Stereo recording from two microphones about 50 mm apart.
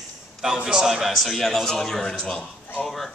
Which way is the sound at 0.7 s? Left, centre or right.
Centre.